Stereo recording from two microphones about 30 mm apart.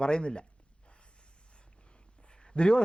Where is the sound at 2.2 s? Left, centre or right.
Left.